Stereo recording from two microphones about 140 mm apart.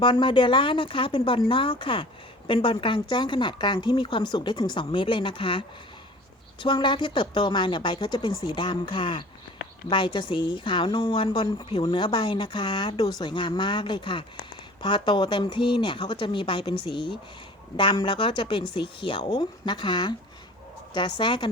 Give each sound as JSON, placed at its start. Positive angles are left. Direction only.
{"t": 0.0, "sound": "a woman's voice", "side_deg": 35}